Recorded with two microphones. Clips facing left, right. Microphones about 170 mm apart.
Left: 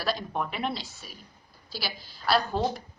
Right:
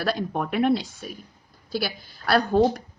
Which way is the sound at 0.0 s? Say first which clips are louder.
Right 4 dB; 50° right (ahead or behind).